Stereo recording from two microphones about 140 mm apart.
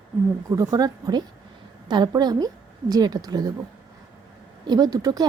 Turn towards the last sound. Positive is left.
turn(degrees=-25)  # may be behind; listen again after turning